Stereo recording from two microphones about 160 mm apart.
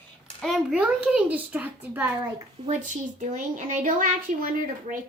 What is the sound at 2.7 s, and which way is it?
A woman's voice, 50° right (ahead or behind).